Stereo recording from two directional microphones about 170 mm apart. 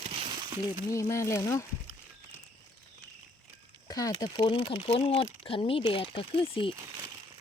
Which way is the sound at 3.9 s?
20° left (ahead or behind).